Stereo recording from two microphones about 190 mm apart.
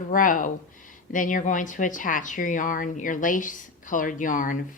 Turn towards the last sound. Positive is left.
turn(degrees=45)  # may be behind; listen again after turning